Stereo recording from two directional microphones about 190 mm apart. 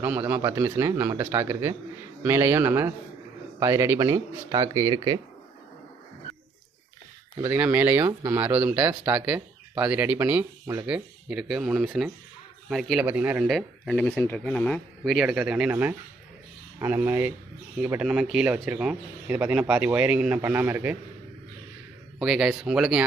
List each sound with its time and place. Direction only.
0.0 s speech: 10° right (ahead or behind)
7.5 s speech: 10° right (ahead or behind)
13.4 s speech: centre (ahead or behind)
22.2 s speech: centre (ahead or behind)